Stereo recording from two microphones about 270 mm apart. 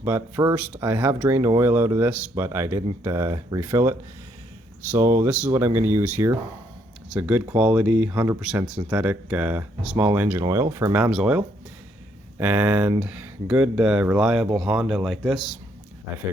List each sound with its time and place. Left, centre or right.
0.0 s speech: centre